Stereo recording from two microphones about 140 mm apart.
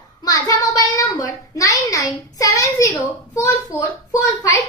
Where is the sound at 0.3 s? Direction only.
25° left (ahead or behind).